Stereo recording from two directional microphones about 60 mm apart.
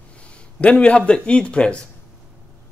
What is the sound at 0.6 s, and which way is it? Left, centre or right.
Speech, left.